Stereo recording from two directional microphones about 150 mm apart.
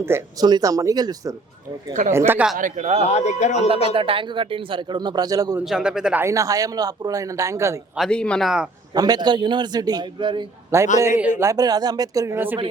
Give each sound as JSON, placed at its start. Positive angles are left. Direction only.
{"t": 0.0, "sound": "a man's voice", "side_deg": -20}
{"t": 1.9, "sound": "speech", "side_deg": -55}
{"t": 2.1, "sound": "speech", "side_deg": -15}
{"t": 2.6, "sound": "a man's voice", "side_deg": -60}
{"t": 3.1, "sound": "speech", "side_deg": 50}
{"t": 3.9, "sound": "speech", "side_deg": -35}
{"t": 5.6, "sound": "speech", "side_deg": -5}
{"t": 6.2, "sound": "a man's voice", "side_deg": -20}
{"t": 7.9, "sound": "speech", "side_deg": 5}
{"t": 9.0, "sound": "a man's voice", "side_deg": -25}
{"t": 10.7, "sound": "a man's voice", "side_deg": -20}